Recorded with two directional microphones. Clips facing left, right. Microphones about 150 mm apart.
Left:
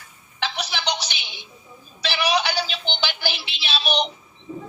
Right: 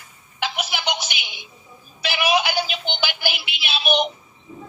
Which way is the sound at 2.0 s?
15° right (ahead or behind).